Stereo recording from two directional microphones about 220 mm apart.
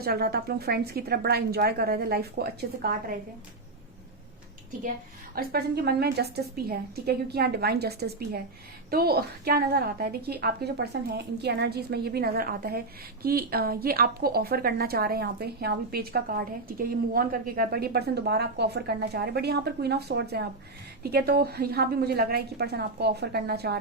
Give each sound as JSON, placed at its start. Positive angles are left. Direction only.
{"t": 0.0, "sound": "speech", "side_deg": -45}
{"t": 5.3, "sound": "speech", "side_deg": -45}